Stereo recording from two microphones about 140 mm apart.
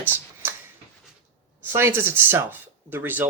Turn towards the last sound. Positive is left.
turn(degrees=-15)  # may be behind; listen again after turning